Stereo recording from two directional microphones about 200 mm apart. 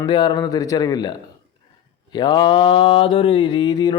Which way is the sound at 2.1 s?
20° left (ahead or behind).